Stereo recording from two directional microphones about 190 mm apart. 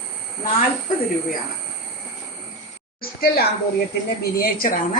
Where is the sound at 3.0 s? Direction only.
55° left (ahead or behind).